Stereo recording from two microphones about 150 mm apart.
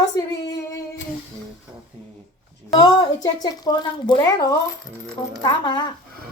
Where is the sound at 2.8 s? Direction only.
25° left (ahead or behind).